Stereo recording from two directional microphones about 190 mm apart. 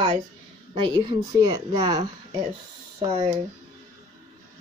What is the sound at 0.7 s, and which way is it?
Speech, 25° right (ahead or behind).